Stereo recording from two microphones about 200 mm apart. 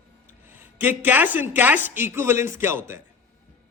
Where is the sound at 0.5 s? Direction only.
10° right (ahead or behind).